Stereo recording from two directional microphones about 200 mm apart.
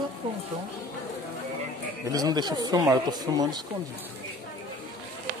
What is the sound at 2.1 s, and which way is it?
Speech, 20° right (ahead or behind).